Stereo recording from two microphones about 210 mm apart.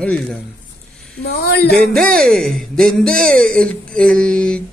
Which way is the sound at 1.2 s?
50° left (ahead or behind).